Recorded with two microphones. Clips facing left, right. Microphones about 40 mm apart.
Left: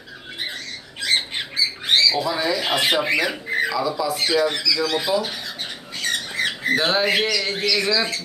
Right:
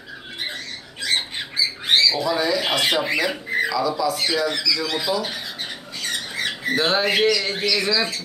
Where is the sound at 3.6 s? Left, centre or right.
Centre.